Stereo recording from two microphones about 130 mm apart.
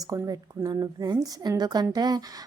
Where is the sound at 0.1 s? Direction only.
25° right (ahead or behind).